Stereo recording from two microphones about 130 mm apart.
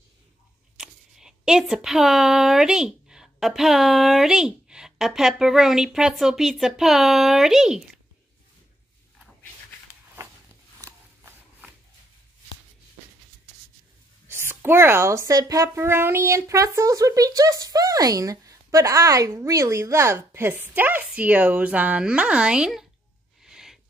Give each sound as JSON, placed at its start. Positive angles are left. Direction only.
{"t": 0.7, "sound": "speech", "side_deg": -5}
{"t": 10.8, "sound": "biting", "side_deg": -20}
{"t": 14.2, "sound": "speech", "side_deg": -20}
{"t": 23.4, "sound": "a sound", "side_deg": -5}